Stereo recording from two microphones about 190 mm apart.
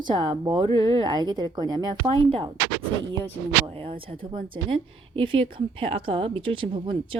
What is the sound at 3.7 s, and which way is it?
A woman's voice, 30° right (ahead or behind).